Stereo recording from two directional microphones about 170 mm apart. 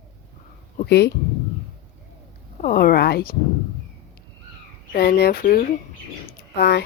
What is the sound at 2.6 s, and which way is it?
Speech, 60° left (ahead or behind).